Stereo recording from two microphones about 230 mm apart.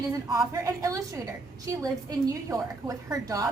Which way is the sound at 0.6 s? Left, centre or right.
Centre.